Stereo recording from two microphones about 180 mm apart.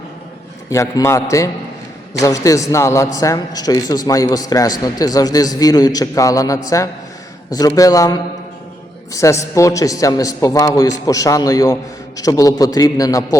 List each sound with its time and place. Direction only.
0.7 s a man's voice: 15° left (ahead or behind)